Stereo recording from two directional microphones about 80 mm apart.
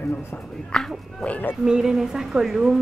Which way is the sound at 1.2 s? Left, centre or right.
Centre.